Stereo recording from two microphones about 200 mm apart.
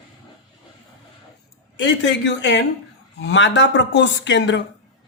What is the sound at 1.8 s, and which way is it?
Speech, 65° left (ahead or behind).